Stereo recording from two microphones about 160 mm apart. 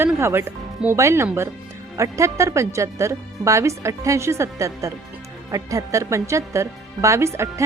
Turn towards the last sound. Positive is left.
turn(degrees=-20)  # may be behind; listen again after turning